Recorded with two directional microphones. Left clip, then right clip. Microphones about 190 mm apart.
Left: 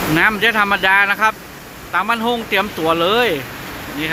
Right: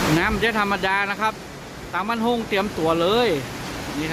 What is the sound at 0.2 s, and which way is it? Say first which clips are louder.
Speech: left 7 dB; centre (ahead or behind).